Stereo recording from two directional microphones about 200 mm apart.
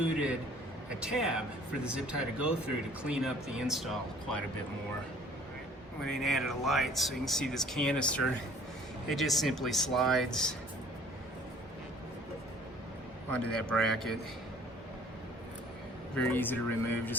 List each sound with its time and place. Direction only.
0.9 s speech: 5° right (ahead or behind)
6.0 s speech: centre (ahead or behind)
13.3 s speech: 5° left (ahead or behind)
16.1 s speech: 10° left (ahead or behind)